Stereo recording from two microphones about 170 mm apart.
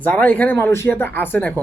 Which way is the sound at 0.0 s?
10° left (ahead or behind).